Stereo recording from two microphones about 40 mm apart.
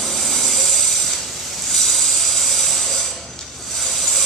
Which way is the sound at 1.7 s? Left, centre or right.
Centre.